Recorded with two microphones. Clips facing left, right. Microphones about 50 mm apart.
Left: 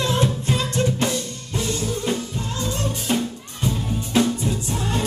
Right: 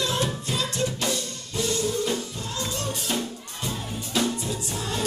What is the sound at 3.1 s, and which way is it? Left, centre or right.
Music, left.